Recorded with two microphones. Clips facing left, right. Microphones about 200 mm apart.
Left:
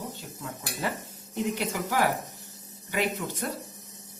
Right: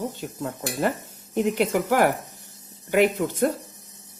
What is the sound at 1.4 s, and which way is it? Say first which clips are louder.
A woman's voice: right 7 dB; 55° right (ahead or behind).